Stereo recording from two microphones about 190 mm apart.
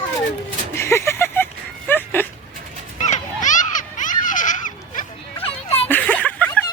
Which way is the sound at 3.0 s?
40° left (ahead or behind).